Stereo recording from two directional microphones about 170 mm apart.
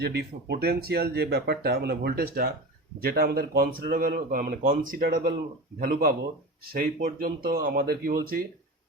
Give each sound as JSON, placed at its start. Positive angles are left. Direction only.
{"t": 0.0, "sound": "speech", "side_deg": -75}